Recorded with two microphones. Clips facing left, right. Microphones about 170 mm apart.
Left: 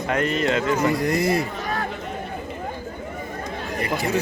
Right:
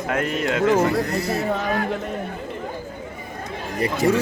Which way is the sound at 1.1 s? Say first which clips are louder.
Left 3 dB; 90° left.